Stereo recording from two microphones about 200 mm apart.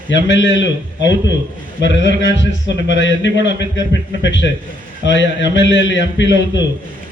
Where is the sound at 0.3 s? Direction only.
65° left (ahead or behind).